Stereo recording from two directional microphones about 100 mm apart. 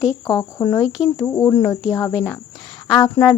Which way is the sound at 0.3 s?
50° left (ahead or behind).